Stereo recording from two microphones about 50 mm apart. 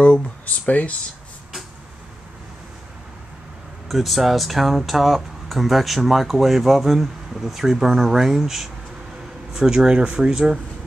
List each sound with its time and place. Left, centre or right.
0.7 s speech: left
3.9 s speech: centre